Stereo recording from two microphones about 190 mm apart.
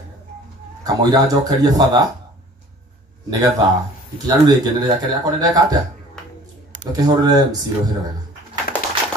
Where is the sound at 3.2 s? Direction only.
20° right (ahead or behind).